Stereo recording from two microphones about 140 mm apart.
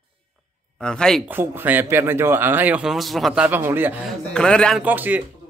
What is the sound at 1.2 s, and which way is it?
Speech, 15° right (ahead or behind).